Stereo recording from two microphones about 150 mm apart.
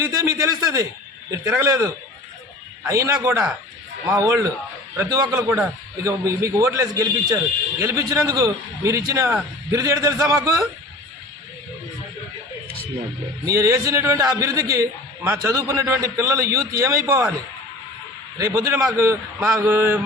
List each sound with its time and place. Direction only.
0.0 s a man's voice: 20° right (ahead or behind)
13.5 s a man's voice: 20° right (ahead or behind)
18.3 s a man's voice: 20° right (ahead or behind)